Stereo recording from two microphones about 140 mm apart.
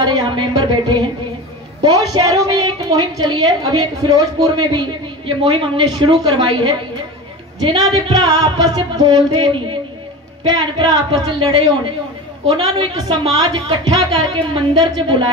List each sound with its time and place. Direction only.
0.0 s a woman's voice: 30° right (ahead or behind)
7.6 s a sound: 30° right (ahead or behind)
10.4 s a woman's voice: 30° right (ahead or behind)